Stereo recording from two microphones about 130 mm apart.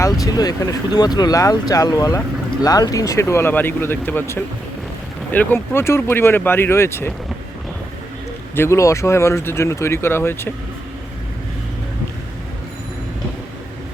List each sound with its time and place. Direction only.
0.0 s speech: 30° left (ahead or behind)
8.5 s speech: 20° left (ahead or behind)